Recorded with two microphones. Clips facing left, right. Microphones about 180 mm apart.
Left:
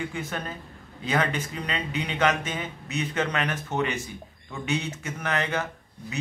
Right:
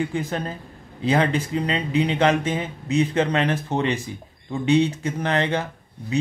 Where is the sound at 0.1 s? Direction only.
30° right (ahead or behind).